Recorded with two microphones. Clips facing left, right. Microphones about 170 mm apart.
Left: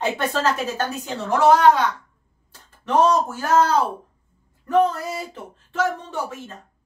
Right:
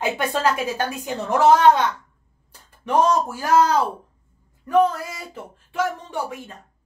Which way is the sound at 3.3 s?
10° right (ahead or behind).